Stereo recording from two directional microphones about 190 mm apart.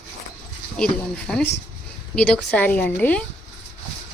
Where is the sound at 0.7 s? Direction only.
5° left (ahead or behind).